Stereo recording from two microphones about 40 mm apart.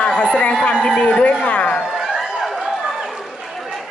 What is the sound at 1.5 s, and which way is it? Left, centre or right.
Speech, left.